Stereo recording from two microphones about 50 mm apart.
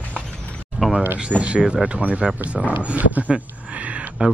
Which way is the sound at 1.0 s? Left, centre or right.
Right.